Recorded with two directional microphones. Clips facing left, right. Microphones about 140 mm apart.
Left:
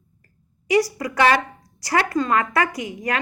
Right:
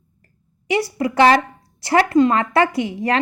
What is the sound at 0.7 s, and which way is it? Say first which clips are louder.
A woman's voice: even; 25° right (ahead or behind).